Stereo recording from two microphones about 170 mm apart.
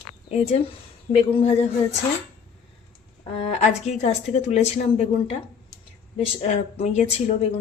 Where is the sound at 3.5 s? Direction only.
40° left (ahead or behind).